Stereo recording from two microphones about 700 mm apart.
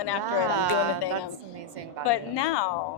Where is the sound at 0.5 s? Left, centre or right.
Right.